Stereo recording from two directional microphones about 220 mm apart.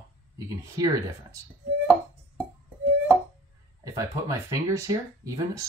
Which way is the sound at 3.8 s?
15° right (ahead or behind).